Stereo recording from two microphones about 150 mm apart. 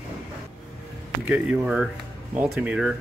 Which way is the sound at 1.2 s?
5° right (ahead or behind).